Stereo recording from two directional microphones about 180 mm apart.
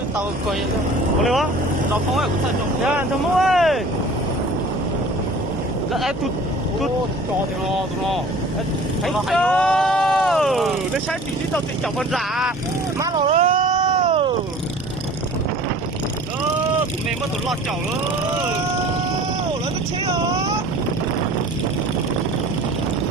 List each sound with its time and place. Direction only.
1.2 s speech: centre (ahead or behind)
2.8 s speech: 5° right (ahead or behind)
5.9 s speech: centre (ahead or behind)
9.0 s a sound: 5° left (ahead or behind)
11.5 s speech: centre (ahead or behind)
13.0 s vehicle: 30° right (ahead or behind)
20.1 s vehicle: 20° right (ahead or behind)